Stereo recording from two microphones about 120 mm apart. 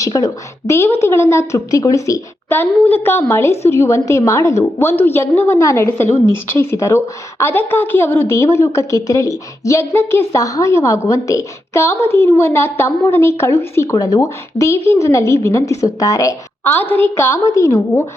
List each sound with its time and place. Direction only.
0.0 s a woman's voice: 30° left (ahead or behind)